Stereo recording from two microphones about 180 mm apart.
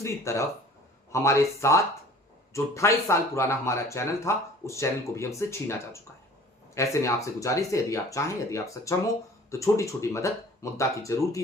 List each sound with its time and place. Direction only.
0.0 s speech: 15° left (ahead or behind)